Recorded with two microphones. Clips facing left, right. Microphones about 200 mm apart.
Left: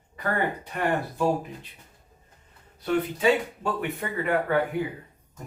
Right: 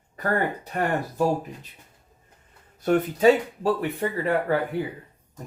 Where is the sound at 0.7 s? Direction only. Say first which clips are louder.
Right 2 dB; 40° right (ahead or behind).